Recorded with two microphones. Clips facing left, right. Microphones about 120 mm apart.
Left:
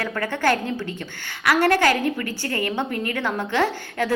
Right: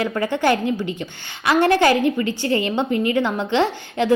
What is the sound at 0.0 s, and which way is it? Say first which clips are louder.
A woman's voice: right 3 dB; 15° right (ahead or behind).